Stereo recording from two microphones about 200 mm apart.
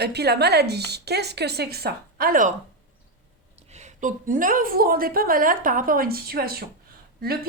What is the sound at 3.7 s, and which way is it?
A woman's voice, 35° right (ahead or behind).